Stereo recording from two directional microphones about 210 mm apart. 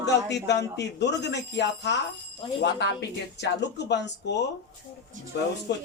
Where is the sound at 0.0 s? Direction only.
55° left (ahead or behind).